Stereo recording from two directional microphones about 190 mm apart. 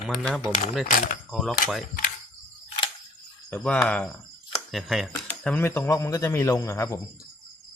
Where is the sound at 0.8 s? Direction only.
40° left (ahead or behind).